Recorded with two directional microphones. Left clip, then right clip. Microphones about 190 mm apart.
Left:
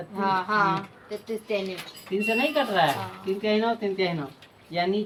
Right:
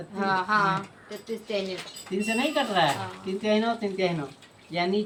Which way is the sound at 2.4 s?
15° left (ahead or behind).